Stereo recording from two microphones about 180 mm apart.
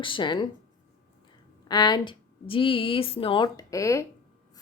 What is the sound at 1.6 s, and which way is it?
A woman's voice, 20° left (ahead or behind).